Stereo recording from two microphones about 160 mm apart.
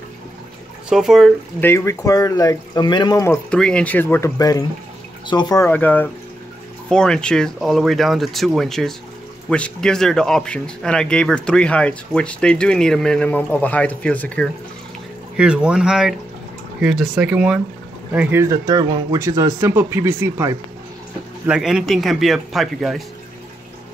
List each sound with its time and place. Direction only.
0.8 s speech: 5° right (ahead or behind)
1.6 s speech: 15° left (ahead or behind)
3.4 s speech: 5° left (ahead or behind); by 5.7 s 25° left (ahead or behind)
5.7 s speech: 10° left (ahead or behind)
15.3 s speech: 5° right (ahead or behind)
18.9 s speech: 30° right (ahead or behind)
19.1 s speech: 20° right (ahead or behind)
21.5 s speech: 5° right (ahead or behind)